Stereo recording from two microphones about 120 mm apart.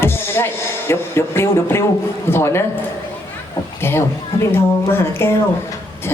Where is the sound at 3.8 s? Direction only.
20° left (ahead or behind).